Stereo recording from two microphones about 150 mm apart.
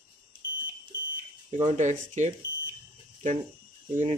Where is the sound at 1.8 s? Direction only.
55° right (ahead or behind).